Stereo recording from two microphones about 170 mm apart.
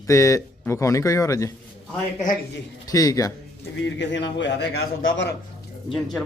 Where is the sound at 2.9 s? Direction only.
20° left (ahead or behind).